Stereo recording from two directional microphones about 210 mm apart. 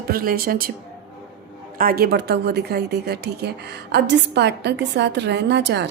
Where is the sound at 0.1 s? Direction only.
45° right (ahead or behind).